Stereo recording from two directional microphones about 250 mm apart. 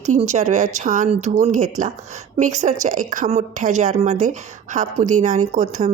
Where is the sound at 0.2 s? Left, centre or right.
Right.